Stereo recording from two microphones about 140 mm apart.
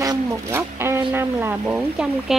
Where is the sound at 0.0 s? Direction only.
25° right (ahead or behind).